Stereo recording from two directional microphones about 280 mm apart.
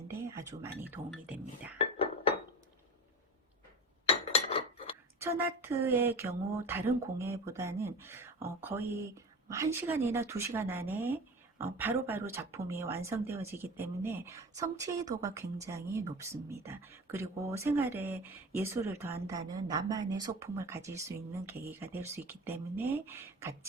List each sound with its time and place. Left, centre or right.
0.1 s speech: centre
4.0 s chink: left
5.2 s speech: centre